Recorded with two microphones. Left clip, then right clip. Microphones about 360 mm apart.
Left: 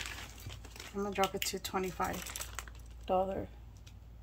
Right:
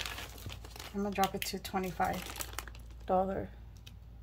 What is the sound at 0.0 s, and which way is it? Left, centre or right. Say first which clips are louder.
Crumpling: right 3 dB; right.